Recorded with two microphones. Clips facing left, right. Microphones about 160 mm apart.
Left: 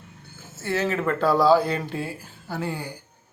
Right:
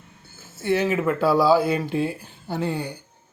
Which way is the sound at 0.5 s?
15° right (ahead or behind).